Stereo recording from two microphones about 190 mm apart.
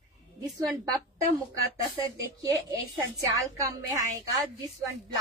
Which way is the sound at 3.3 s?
15° right (ahead or behind).